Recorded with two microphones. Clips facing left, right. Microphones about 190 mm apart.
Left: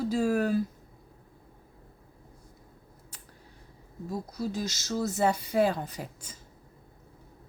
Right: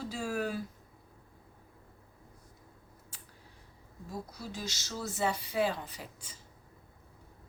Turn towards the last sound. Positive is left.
turn(degrees=45)  # may be behind; listen again after turning